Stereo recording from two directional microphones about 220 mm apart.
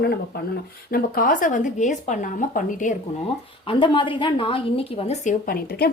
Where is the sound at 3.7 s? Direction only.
25° left (ahead or behind).